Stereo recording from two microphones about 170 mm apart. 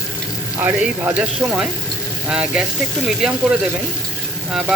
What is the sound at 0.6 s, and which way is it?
A man's voice, 10° right (ahead or behind).